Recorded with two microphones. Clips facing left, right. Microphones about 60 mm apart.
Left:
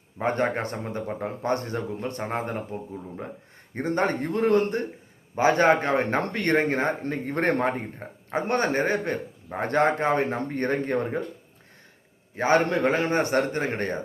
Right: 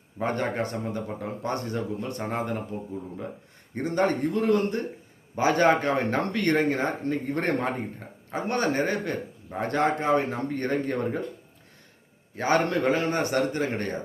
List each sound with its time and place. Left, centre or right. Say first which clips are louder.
0.2 s speech: left 2 dB; left
3.8 s speech: even; left
12.4 s speech: left 2 dB; left